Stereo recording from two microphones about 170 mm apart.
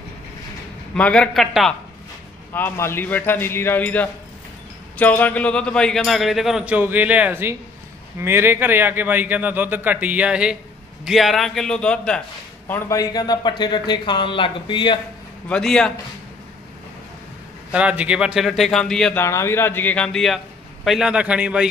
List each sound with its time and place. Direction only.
0.9 s speech: 5° left (ahead or behind)
2.5 s a man's voice: 15° left (ahead or behind)
12.6 s speech: 15° left (ahead or behind)
15.4 s speech: 5° left (ahead or behind)
17.7 s speech: 5° right (ahead or behind)
19.2 s a man's voice: 15° left (ahead or behind); by 21.6 s 5° right (ahead or behind)